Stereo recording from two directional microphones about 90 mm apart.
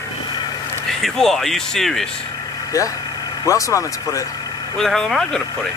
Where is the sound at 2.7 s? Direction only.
35° left (ahead or behind).